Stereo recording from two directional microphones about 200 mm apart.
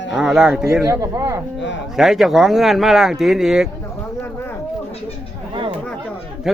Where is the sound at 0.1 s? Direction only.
Centre (ahead or behind).